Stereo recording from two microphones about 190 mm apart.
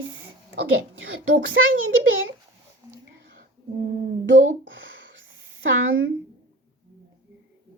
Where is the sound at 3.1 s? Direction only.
70° right (ahead or behind).